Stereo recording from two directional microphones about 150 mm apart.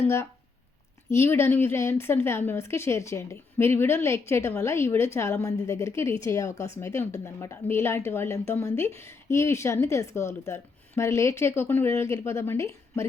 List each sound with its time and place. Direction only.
1.1 s a woman's voice: 15° left (ahead or behind)